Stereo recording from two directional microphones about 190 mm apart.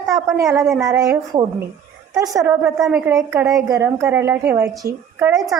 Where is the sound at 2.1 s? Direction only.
20° right (ahead or behind).